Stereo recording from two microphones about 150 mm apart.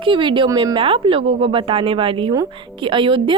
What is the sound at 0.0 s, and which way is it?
Speech, 35° right (ahead or behind).